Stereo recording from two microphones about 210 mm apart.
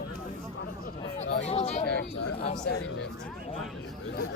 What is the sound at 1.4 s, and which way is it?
Speech, 30° left (ahead or behind).